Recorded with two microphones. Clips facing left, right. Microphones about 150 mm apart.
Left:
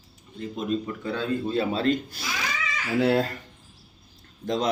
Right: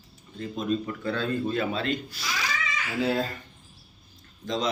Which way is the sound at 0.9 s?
15° left (ahead or behind).